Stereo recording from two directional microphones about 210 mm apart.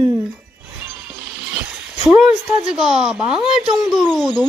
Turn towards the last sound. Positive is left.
turn(degrees=0)  # may be behind; listen again after turning